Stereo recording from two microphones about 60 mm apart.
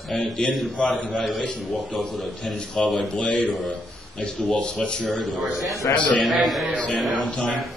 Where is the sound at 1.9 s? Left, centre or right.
Centre.